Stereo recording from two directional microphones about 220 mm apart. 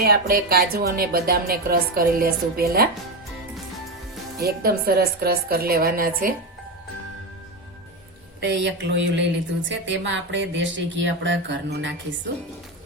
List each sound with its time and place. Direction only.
0.0 s speech: 45° right (ahead or behind)
4.4 s speech: 45° right (ahead or behind)
8.4 s a woman's voice: 50° right (ahead or behind)